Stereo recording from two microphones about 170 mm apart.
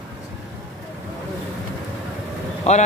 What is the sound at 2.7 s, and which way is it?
Speech, 45° left (ahead or behind).